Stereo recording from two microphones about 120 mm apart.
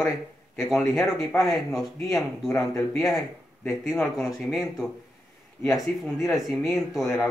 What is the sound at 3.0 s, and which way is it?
Speech, centre (ahead or behind).